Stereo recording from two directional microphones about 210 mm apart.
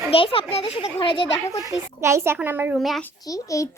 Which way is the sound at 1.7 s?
15° right (ahead or behind).